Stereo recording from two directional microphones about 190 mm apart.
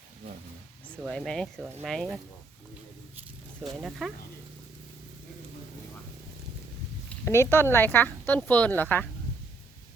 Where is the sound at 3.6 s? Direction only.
Centre (ahead or behind).